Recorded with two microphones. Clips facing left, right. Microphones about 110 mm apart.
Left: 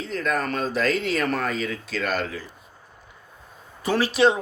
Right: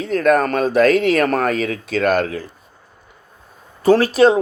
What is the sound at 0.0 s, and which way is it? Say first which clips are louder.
Speech: right 10 dB; 60° right (ahead or behind).